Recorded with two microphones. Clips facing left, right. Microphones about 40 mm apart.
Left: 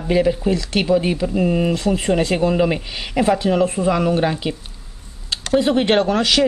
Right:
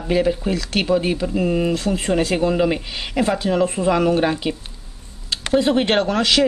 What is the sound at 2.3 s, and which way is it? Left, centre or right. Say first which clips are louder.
Speech: left 1 dB; centre.